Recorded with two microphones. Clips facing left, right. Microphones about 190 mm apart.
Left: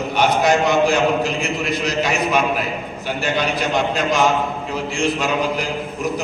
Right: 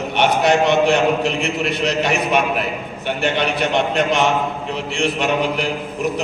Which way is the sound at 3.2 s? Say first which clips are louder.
Right 1 dB; 65° right (ahead or behind).